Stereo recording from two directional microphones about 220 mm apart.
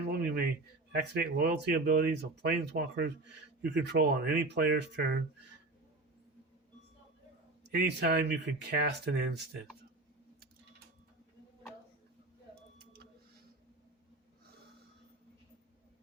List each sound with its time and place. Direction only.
0.1 s a sound: 45° right (ahead or behind)
0.9 s speech: 50° right (ahead or behind)
7.8 s speech: 50° right (ahead or behind)